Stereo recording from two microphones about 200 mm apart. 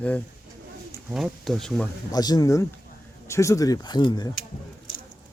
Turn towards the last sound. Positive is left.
turn(degrees=20)  # may be behind; listen again after turning